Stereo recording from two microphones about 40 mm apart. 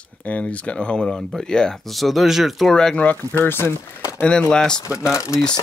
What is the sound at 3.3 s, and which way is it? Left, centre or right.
Speech, left.